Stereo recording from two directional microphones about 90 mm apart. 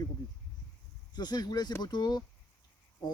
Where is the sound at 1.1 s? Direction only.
50° left (ahead or behind).